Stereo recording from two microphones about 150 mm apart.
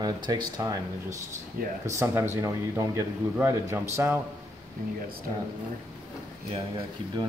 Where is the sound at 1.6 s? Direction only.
75° right (ahead or behind).